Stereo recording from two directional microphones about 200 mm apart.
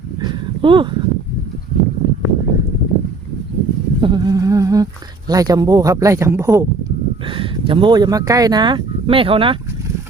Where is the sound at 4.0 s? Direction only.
20° right (ahead or behind).